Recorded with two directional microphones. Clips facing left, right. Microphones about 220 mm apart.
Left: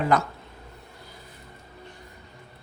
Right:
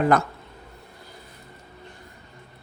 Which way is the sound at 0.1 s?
55° right (ahead or behind).